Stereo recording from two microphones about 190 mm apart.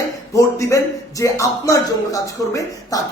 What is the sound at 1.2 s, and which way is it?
A man's voice, 15° left (ahead or behind).